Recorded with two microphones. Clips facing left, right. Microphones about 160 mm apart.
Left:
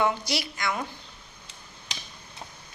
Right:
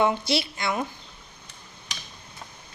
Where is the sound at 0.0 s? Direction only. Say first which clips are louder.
Right 3 dB; 25° right (ahead or behind).